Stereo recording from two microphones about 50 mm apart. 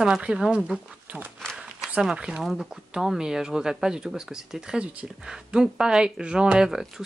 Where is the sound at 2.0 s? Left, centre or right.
Centre.